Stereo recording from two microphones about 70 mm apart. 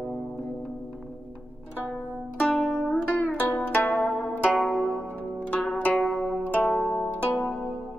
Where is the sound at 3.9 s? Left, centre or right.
Centre.